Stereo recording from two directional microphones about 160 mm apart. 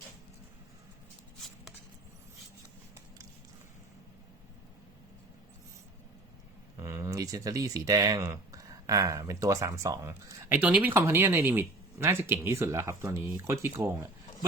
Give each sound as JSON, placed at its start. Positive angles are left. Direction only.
{"t": 6.7, "sound": "speech", "side_deg": -20}